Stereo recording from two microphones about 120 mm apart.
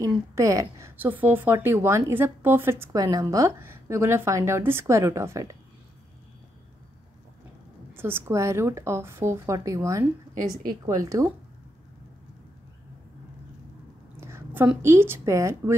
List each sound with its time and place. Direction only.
0.0 s a woman's voice: 25° right (ahead or behind)
3.0 s a woman's voice: 30° right (ahead or behind)
7.9 s a woman's voice: 20° right (ahead or behind)
14.2 s a sound: 20° right (ahead or behind)
14.8 s a woman's voice: 20° right (ahead or behind)